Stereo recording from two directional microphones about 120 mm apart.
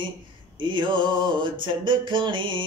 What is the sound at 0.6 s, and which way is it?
Music, 40° right (ahead or behind).